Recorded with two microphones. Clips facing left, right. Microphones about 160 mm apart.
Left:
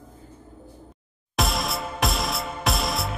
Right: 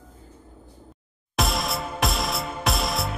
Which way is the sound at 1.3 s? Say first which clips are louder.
Even; centre (ahead or behind).